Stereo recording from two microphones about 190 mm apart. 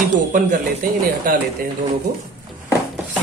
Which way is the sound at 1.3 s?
45° right (ahead or behind).